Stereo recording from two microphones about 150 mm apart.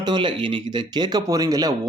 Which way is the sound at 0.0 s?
30° right (ahead or behind).